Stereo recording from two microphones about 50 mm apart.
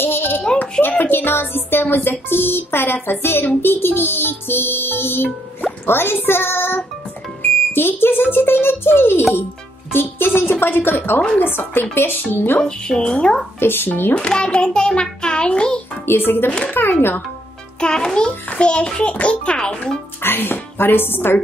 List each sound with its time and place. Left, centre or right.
0.0 s a sound: left
0.6 s speech: left
12.5 s a child's voice: centre
13.6 s speech: left
14.1 s a child's voice: centre
16.1 s speech: left
17.7 s a child's voice: centre
20.2 s speech: left